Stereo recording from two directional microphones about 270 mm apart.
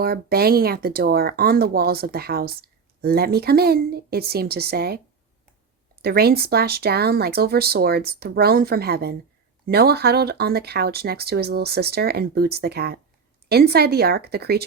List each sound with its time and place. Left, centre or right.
0.0 s speech: right
6.0 s speech: right